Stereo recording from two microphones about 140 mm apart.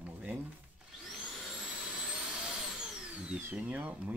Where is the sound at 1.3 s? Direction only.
Centre (ahead or behind).